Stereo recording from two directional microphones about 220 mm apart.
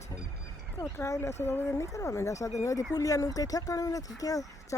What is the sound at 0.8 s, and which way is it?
Speech, 15° left (ahead or behind).